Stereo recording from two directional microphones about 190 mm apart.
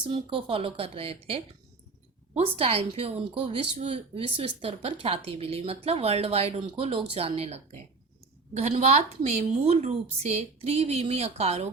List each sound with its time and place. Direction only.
0.0 s a woman's voice: 25° right (ahead or behind)
2.6 s speech: 30° right (ahead or behind)